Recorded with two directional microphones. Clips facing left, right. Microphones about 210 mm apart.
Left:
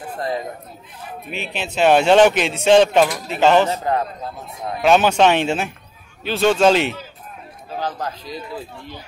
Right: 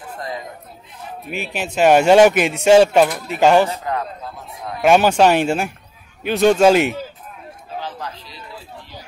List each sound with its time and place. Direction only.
1.3 s speech: 10° right (ahead or behind)
4.8 s speech: 10° right (ahead or behind)
7.8 s speech: 45° left (ahead or behind)